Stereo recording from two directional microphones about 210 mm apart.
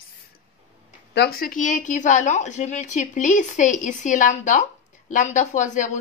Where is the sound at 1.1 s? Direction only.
50° left (ahead or behind).